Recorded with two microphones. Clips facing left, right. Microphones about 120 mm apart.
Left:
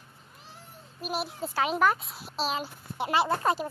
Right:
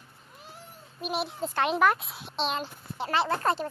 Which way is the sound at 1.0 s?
Centre (ahead or behind).